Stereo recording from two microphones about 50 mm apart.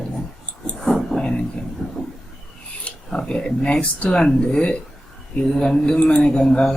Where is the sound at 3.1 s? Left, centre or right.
Centre.